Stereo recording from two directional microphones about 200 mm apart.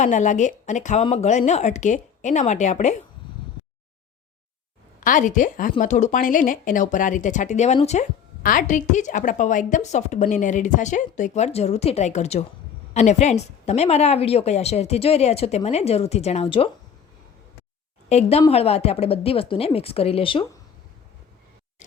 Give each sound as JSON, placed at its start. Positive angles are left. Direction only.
{"t": 0.0, "sound": "a woman's voice", "side_deg": 35}
{"t": 5.0, "sound": "a woman's voice", "side_deg": 40}
{"t": 18.1, "sound": "speech", "side_deg": 30}